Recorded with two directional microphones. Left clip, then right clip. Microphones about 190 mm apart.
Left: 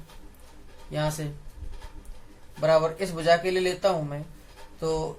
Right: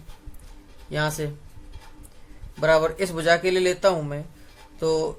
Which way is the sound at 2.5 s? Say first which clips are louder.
Right 2 dB; 50° right (ahead or behind).